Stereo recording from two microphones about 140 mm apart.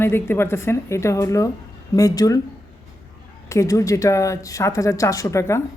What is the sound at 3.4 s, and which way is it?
A woman's voice, 20° left (ahead or behind).